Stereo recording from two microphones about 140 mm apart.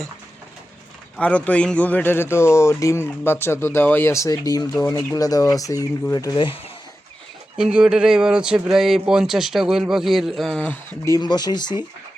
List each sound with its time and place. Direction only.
1.1 s speech: 10° left (ahead or behind); by 6.6 s 35° left (ahead or behind)
7.5 s speech: 5° right (ahead or behind); by 11.2 s 15° left (ahead or behind)
11.2 s speech: 30° left (ahead or behind)